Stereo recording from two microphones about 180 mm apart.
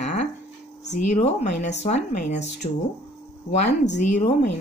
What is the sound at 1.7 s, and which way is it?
Speech, 40° left (ahead or behind).